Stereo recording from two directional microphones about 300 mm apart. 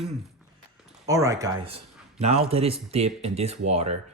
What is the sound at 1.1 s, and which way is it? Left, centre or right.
Speech, centre.